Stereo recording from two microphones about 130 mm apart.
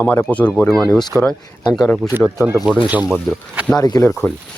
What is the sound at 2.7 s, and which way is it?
Speech, 10° right (ahead or behind).